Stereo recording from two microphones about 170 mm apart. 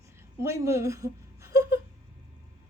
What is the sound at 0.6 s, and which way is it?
Speech, 15° right (ahead or behind).